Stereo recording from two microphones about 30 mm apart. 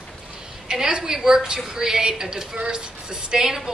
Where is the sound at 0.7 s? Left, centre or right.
Right.